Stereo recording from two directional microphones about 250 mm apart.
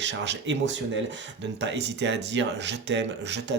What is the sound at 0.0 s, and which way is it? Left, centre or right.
Speech, right.